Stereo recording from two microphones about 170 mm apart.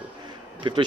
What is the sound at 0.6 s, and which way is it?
Speech, 30° right (ahead or behind).